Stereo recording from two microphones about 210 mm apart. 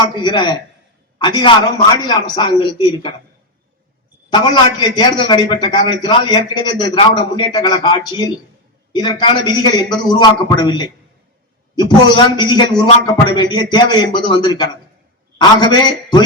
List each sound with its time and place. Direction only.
0.0 s a man's voice: 20° left (ahead or behind)
4.9 s a man's voice: 20° left (ahead or behind)